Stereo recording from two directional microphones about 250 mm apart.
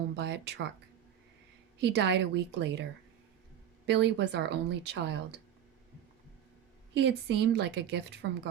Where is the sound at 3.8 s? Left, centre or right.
Right.